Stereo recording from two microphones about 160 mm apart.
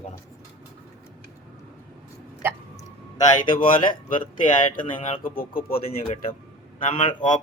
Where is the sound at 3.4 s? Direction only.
35° left (ahead or behind).